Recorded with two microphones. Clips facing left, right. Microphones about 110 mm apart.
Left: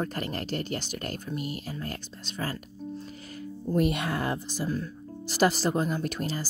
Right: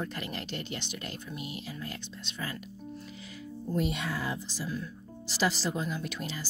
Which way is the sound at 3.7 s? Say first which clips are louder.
Left 5 dB; 55° left (ahead or behind).